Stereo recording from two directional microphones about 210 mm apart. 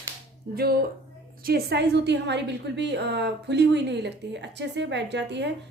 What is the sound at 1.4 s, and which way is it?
A woman's voice, 50° right (ahead or behind).